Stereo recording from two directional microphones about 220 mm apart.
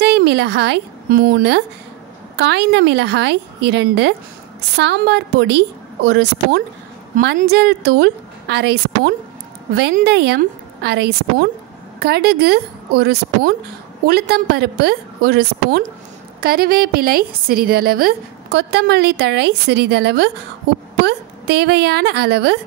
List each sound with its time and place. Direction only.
0.0 s a woman's voice: 50° right (ahead or behind)